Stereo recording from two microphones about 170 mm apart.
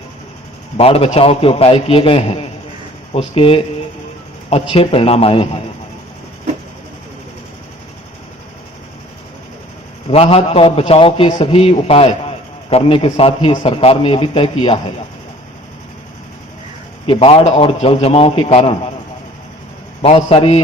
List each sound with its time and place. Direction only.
0.8 s a man's voice: 35° left (ahead or behind)
4.7 s a man's voice: 35° left (ahead or behind)
10.1 s a man's voice: 35° left (ahead or behind)
17.1 s a man's voice: 35° left (ahead or behind)
20.0 s a man's voice: 35° left (ahead or behind)